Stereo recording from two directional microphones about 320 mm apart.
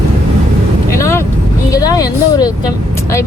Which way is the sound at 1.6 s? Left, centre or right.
Centre.